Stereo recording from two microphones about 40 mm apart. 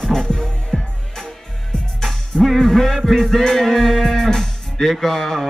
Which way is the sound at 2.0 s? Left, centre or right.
Centre.